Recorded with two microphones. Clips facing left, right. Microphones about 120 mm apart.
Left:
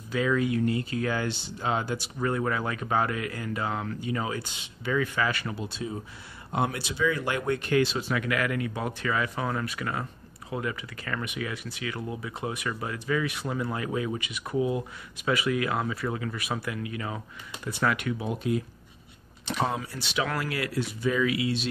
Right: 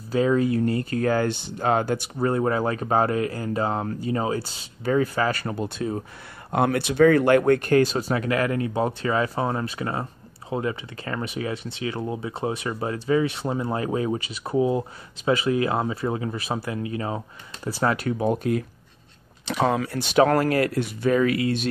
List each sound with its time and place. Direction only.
0.1 s speech: 35° right (ahead or behind); by 2.0 s 50° right (ahead or behind)
2.1 s speech: 35° right (ahead or behind)
19.4 s speech: 85° right
20.0 s speech: 45° right (ahead or behind)